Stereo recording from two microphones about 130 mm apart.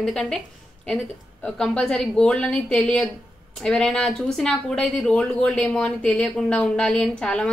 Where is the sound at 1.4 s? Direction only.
5° left (ahead or behind).